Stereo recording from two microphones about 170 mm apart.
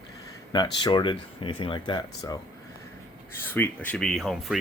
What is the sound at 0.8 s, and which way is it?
Speech, 25° left (ahead or behind).